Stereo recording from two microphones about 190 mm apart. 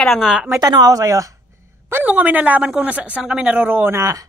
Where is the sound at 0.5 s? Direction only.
20° right (ahead or behind).